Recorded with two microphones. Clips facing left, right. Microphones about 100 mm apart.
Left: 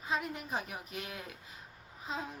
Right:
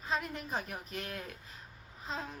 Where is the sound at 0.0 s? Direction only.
10° left (ahead or behind).